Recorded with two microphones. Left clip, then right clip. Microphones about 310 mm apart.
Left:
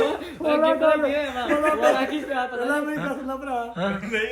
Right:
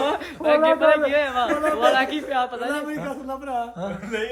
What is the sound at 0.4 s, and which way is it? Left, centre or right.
A man's voice, centre.